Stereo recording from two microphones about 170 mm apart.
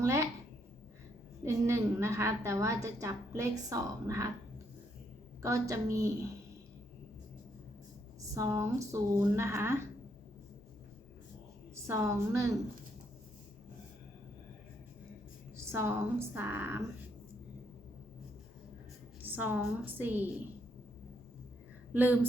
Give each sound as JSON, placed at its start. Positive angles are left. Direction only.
{"t": 0.0, "sound": "speech", "side_deg": -15}
{"t": 1.5, "sound": "a woman's voice", "side_deg": -15}
{"t": 8.4, "sound": "a woman's voice", "side_deg": -15}
{"t": 11.7, "sound": "a woman's voice", "side_deg": -15}
{"t": 15.5, "sound": "a woman's voice", "side_deg": -15}
{"t": 19.2, "sound": "a woman's voice", "side_deg": -10}
{"t": 21.9, "sound": "a woman's voice", "side_deg": -10}